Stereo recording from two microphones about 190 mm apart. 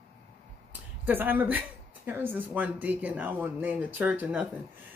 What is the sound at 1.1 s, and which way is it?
Speech, 10° right (ahead or behind).